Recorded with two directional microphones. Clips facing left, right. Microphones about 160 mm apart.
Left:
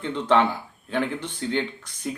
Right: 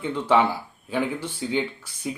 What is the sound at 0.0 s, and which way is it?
Speech, 10° right (ahead or behind).